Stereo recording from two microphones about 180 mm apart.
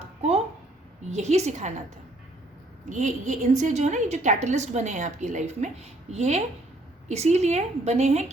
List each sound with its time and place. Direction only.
1.1 s a woman's voice: 40° right (ahead or behind)
2.9 s a woman's voice: 40° right (ahead or behind)